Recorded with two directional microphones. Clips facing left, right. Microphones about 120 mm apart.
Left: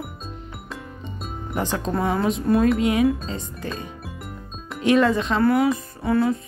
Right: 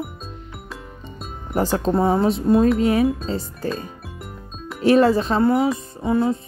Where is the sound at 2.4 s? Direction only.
25° right (ahead or behind).